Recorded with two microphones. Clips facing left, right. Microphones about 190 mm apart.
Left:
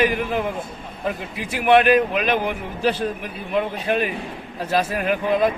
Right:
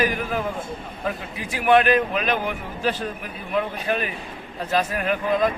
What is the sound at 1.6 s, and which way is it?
Speech, 5° left (ahead or behind).